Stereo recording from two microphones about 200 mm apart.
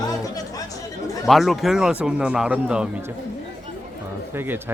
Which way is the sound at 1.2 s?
Centre (ahead or behind).